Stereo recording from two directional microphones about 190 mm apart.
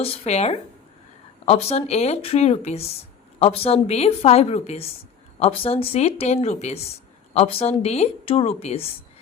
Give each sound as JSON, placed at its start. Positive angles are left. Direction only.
{"t": 0.0, "sound": "speech", "side_deg": 35}